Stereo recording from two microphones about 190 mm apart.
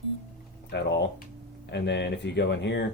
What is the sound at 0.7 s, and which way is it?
Speech, 65° left (ahead or behind).